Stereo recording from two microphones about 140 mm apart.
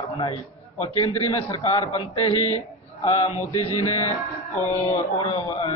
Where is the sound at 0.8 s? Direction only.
45° left (ahead or behind).